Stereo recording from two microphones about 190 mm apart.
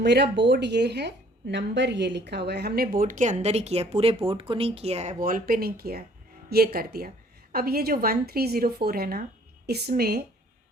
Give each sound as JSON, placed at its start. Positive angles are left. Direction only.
{"t": 0.0, "sound": "a woman's voice", "side_deg": -65}